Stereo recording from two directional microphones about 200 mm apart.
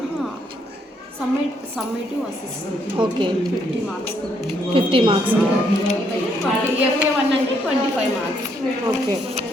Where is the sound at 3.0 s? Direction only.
25° right (ahead or behind).